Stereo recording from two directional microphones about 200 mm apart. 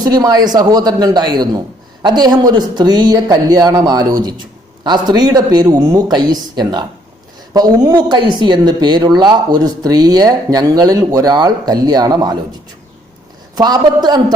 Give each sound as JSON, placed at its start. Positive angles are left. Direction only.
{"t": 0.0, "sound": "a man's voice", "side_deg": -20}
{"t": 13.6, "sound": "a man's voice", "side_deg": -20}